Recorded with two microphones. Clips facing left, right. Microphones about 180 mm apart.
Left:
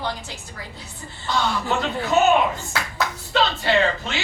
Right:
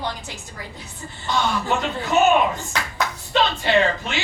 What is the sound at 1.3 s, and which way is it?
Speech, 15° right (ahead or behind).